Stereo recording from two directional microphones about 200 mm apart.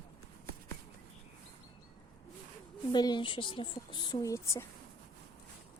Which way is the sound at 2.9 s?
20° left (ahead or behind).